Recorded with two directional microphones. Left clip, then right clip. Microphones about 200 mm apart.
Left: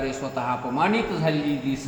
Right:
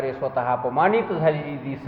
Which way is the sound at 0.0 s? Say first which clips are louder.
Right 3 dB; 20° right (ahead or behind).